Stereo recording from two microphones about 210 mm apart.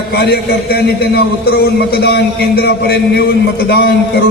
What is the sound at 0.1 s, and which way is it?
A man's voice, 50° left (ahead or behind).